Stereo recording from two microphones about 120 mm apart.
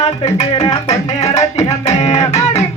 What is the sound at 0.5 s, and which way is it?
Music, 25° left (ahead or behind).